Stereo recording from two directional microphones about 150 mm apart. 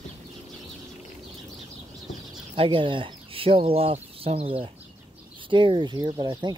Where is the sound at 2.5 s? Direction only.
35° right (ahead or behind).